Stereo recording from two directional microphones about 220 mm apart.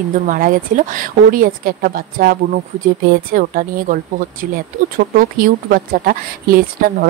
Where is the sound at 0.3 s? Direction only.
35° right (ahead or behind).